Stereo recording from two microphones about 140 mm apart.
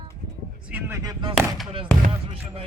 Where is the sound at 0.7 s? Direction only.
15° right (ahead or behind).